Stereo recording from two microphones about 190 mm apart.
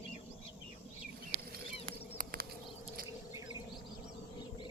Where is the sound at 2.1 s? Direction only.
50° right (ahead or behind).